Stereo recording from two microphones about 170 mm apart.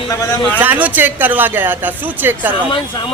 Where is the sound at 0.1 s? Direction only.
20° left (ahead or behind).